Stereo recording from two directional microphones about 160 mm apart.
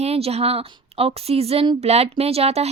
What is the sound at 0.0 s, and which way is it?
A woman's voice, 40° right (ahead or behind).